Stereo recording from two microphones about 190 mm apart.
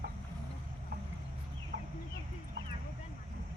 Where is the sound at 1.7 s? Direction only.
40° right (ahead or behind).